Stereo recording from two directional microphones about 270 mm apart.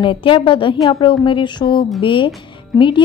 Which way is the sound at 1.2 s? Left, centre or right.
Centre.